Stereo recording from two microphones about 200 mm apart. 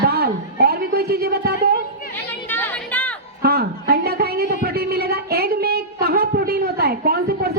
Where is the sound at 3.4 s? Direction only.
50° right (ahead or behind).